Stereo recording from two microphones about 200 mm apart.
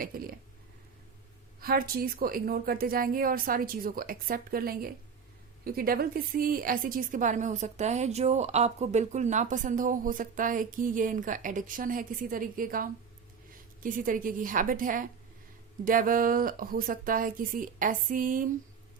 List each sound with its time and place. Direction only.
0.0 s a woman's voice: 45° right (ahead or behind)
1.6 s a woman's voice: 50° right (ahead or behind)